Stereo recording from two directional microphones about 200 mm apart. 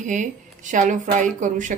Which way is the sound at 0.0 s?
40° right (ahead or behind).